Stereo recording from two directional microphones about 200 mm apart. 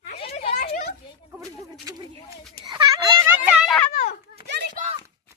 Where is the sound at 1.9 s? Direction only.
20° right (ahead or behind).